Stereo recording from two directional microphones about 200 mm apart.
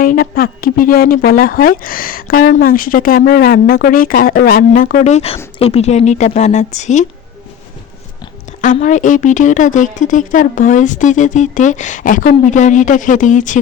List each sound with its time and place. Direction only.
0.0 s a woman's voice: 45° left (ahead or behind)
8.6 s a woman's voice: 40° left (ahead or behind)